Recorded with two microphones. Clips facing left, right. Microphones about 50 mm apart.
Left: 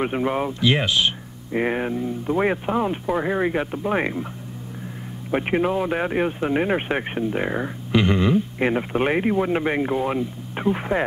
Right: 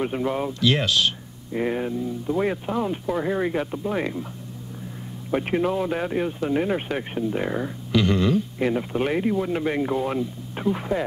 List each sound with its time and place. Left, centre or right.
0.0 s speech: left
1.5 s speech: left
5.3 s speech: left